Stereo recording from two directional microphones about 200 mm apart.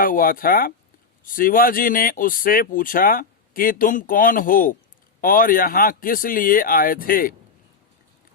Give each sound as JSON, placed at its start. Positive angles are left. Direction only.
{"t": 0.0, "sound": "speech", "side_deg": 45}